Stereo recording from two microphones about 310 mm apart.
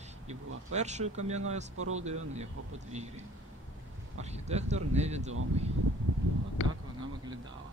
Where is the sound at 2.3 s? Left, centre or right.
Right.